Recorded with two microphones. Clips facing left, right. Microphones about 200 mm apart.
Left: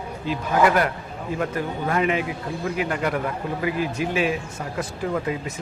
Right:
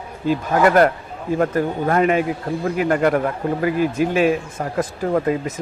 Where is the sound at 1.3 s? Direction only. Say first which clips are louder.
Right 7 dB; 45° right (ahead or behind).